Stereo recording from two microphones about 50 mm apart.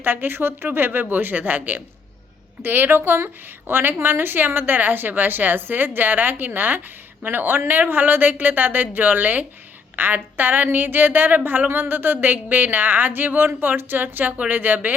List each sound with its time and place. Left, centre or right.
0.0 s a woman's voice: right